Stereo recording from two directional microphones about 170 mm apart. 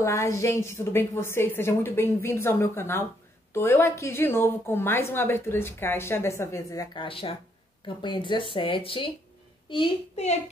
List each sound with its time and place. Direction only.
0.0 s a woman's voice: 15° left (ahead or behind)
10.2 s a child's voice: 40° left (ahead or behind)